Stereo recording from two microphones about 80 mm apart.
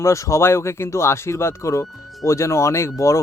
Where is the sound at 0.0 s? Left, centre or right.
Left.